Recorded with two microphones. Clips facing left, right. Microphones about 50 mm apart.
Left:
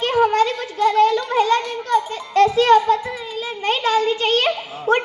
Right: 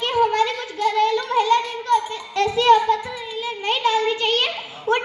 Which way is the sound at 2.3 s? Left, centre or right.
Left.